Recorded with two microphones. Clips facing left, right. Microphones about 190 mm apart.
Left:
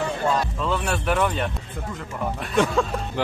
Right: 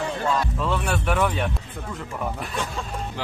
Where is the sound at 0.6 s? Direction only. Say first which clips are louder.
Even; centre (ahead or behind).